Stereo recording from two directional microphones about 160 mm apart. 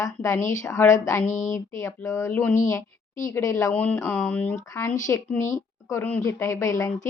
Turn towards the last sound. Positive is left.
turn(degrees=20)  # may be behind; listen again after turning